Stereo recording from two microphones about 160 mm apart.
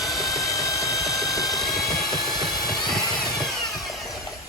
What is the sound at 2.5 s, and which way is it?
Vehicle, 25° left (ahead or behind).